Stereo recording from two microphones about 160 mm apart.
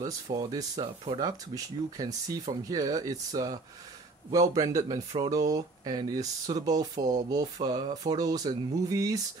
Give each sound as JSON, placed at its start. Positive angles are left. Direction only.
{"t": 0.0, "sound": "speech", "side_deg": -25}
{"t": 7.0, "sound": "speech", "side_deg": -55}
{"t": 7.6, "sound": "speech", "side_deg": -25}